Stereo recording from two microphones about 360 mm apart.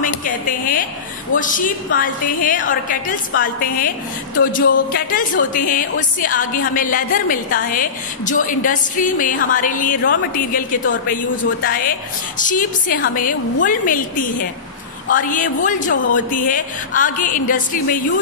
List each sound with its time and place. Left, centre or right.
0.0 s speech: left